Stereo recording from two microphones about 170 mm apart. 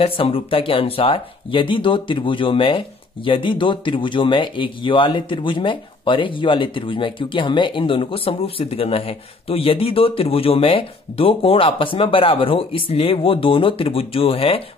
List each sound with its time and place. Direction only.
0.0 s speech: 30° left (ahead or behind)